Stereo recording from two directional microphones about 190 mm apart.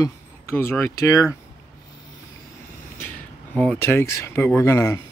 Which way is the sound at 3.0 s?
5° left (ahead or behind).